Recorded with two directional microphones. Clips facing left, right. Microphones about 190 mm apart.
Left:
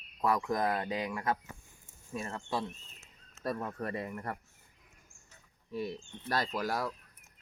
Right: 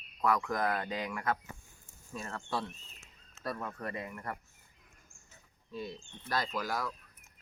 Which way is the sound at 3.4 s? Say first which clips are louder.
Left 3 dB; 30° left (ahead or behind).